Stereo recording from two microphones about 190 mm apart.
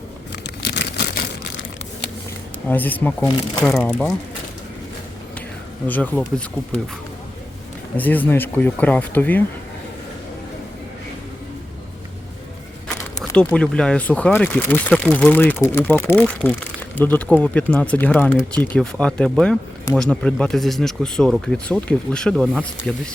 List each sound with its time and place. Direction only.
0.4 s vehicle: 65° left (ahead or behind)
2.6 s speech: 10° left (ahead or behind)
5.9 s speech: 10° left (ahead or behind)
7.9 s speech: 10° left (ahead or behind)
13.3 s speech: 5° left (ahead or behind)